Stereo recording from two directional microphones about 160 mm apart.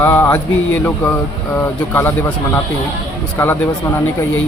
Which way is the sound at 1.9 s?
15° left (ahead or behind).